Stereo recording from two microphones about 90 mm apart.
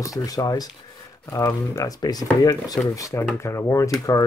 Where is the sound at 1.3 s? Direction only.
35° left (ahead or behind).